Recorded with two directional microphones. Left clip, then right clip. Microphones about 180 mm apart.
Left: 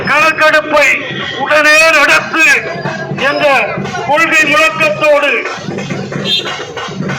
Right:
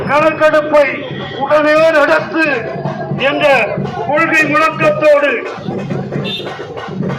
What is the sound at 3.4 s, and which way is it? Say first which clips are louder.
A man's voice: even; centre (ahead or behind).